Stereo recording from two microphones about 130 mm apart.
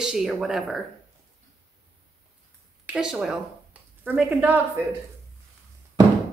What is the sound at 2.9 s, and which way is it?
Speech, 5° right (ahead or behind).